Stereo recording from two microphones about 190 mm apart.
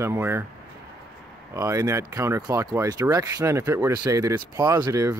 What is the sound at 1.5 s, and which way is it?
Speech, 15° right (ahead or behind).